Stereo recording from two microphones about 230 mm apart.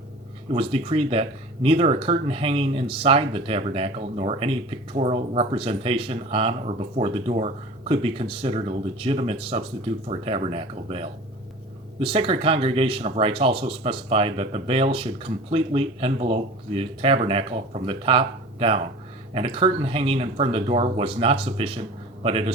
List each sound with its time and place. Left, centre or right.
0.5 s speech: right